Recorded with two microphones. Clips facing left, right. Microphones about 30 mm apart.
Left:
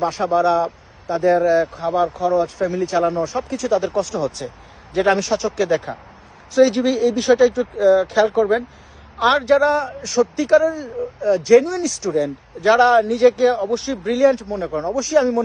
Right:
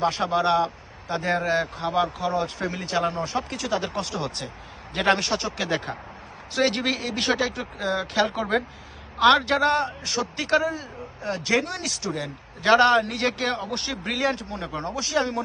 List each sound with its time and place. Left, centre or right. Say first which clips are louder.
0.0 s speech: left 5 dB; right
1.0 s a man's voice: left 9 dB; right
1.7 s speech: left 5 dB; right
3.7 s a man's voice: left 8 dB; right
11.8 s speech: left 9 dB; right
14.5 s a man's voice: left 8 dB; right